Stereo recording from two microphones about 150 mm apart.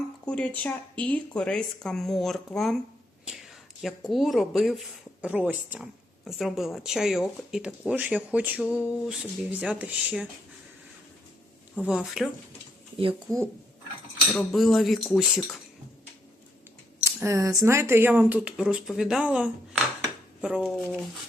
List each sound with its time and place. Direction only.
0.3 s speech: 10° left (ahead or behind)
5.2 s a woman's voice: 10° right (ahead or behind)
11.9 s speech: 5° right (ahead or behind)
13.3 s speech: 20° right (ahead or behind)
14.3 s speech: centre (ahead or behind)
17.0 s a sound: 20° right (ahead or behind)
17.7 s speech: 15° right (ahead or behind)